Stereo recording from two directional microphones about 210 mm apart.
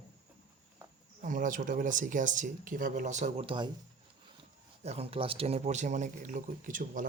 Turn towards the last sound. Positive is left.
turn(degrees=-40)  # may be behind; listen again after turning